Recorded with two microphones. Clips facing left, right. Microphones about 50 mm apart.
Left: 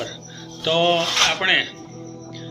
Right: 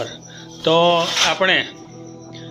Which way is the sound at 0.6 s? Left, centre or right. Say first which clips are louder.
Right 4 dB; centre.